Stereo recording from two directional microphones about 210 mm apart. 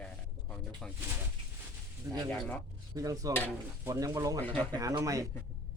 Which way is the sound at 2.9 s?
15° right (ahead or behind).